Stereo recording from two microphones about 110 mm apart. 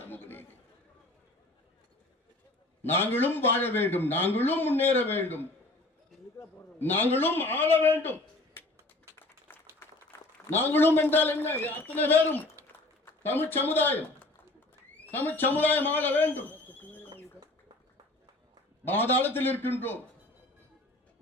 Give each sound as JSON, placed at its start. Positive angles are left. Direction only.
{"t": 0.0, "sound": "chatter", "side_deg": 20}
{"t": 2.8, "sound": "a man's voice", "side_deg": 20}
{"t": 9.5, "sound": "a sound", "side_deg": 20}
{"t": 9.8, "sound": "a man's voice", "side_deg": 20}
{"t": 12.6, "sound": "a sound", "side_deg": -30}
{"t": 13.1, "sound": "a man's voice", "side_deg": 20}
{"t": 18.9, "sound": "a man's voice", "side_deg": 20}